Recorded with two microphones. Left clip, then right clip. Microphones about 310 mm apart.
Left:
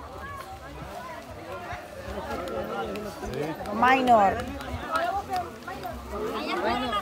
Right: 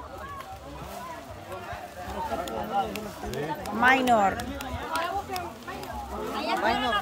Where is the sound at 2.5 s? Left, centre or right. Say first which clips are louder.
Right 2 dB; right.